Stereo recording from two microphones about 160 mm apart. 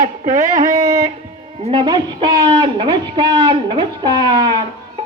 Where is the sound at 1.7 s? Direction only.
25° right (ahead or behind).